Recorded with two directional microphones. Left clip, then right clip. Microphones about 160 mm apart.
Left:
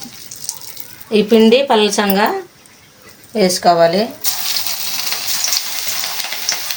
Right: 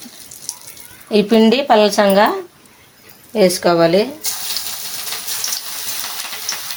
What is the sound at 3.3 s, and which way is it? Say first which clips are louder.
Speech: left 1 dB; 60° right (ahead or behind).